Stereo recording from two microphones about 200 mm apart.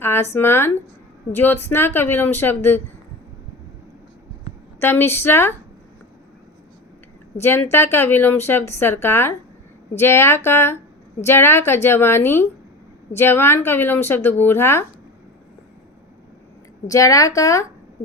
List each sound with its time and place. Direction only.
0.0 s a woman's voice: 10° left (ahead or behind)
4.8 s a woman's voice: 10° left (ahead or behind)
7.4 s a woman's voice: 10° left (ahead or behind)
16.8 s a woman's voice: 15° left (ahead or behind)